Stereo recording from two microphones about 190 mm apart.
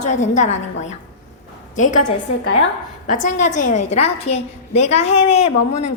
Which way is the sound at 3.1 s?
40° left (ahead or behind).